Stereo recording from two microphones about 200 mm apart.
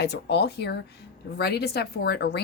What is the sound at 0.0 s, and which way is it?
A woman's voice, 55° left (ahead or behind).